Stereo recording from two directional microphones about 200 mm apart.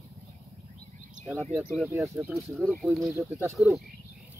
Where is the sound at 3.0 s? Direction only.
15° right (ahead or behind).